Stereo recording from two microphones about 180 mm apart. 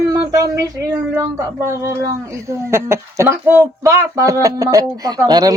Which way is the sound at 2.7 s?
15° right (ahead or behind).